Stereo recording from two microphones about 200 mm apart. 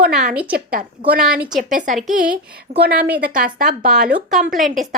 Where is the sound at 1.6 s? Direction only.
40° right (ahead or behind).